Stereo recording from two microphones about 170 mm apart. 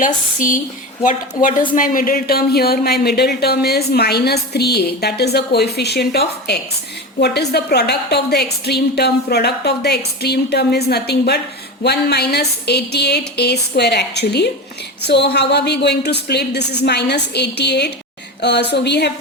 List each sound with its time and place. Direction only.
0.0 s a woman's voice: 50° left (ahead or behind); by 19.1 s 75° left (ahead or behind)